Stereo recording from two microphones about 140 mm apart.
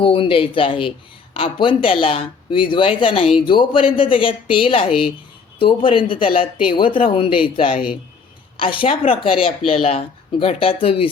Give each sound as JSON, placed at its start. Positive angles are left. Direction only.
{"t": 0.0, "sound": "speech", "side_deg": 40}